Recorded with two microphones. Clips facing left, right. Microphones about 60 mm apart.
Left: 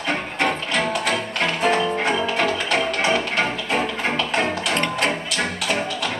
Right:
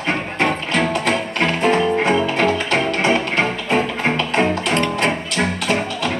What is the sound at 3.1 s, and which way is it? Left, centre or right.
Music, right.